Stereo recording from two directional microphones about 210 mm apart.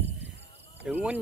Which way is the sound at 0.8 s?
5° right (ahead or behind).